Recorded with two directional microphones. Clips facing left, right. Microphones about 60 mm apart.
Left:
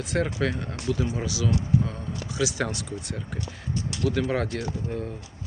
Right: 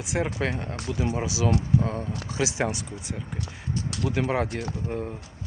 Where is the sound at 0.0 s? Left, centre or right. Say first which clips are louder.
Left 1 dB; centre.